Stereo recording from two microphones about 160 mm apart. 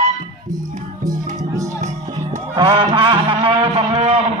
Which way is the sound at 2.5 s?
30° right (ahead or behind).